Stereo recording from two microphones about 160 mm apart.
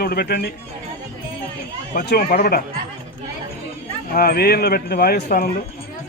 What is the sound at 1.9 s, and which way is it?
Speech, 65° left (ahead or behind).